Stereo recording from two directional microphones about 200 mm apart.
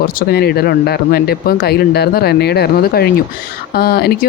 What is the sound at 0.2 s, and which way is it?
Speech, 55° left (ahead or behind).